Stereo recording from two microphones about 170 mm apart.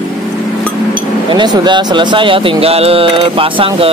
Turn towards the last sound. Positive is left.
turn(degrees=-30)  # may be behind; listen again after turning